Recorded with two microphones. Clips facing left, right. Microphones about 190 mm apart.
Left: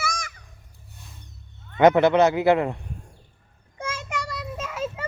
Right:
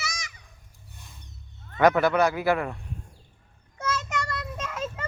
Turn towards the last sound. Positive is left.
turn(degrees=5)  # may be behind; listen again after turning